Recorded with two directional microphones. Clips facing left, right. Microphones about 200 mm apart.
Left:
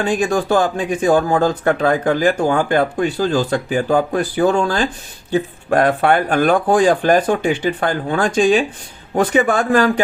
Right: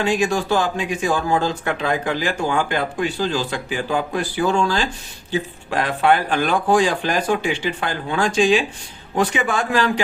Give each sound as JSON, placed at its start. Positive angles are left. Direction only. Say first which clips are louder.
{"t": 0.0, "sound": "speech", "louder": "left 2 dB", "side_deg": 45}